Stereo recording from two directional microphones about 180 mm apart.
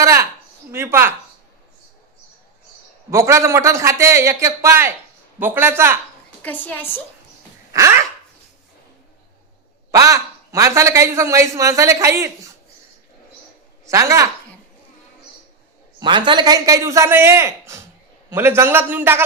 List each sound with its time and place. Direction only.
0.0 s a man's voice: 15° right (ahead or behind)
3.1 s a man's voice: 15° right (ahead or behind)
6.4 s a woman's voice: 10° left (ahead or behind)
7.7 s dog: 15° right (ahead or behind)
9.9 s a man's voice: 20° right (ahead or behind)
13.8 s a man's voice: 15° right (ahead or behind)
16.0 s a man's voice: 25° right (ahead or behind); by 19.2 s 10° right (ahead or behind)